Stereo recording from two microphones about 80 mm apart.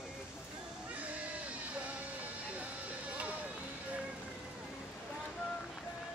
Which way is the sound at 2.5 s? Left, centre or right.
Centre.